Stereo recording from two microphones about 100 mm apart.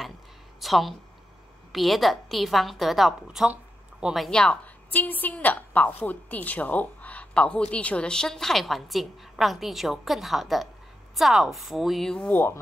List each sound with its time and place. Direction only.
0.6 s a woman's voice: centre (ahead or behind)
12.3 s speech: 20° left (ahead or behind)